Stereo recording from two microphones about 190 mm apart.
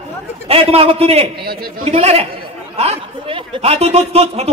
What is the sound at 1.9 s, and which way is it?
Speech, 30° right (ahead or behind).